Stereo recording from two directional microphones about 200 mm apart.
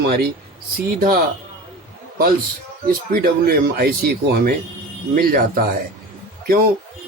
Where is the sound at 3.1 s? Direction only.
50° right (ahead or behind).